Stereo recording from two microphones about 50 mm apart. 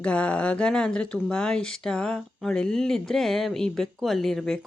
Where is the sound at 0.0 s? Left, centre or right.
Left.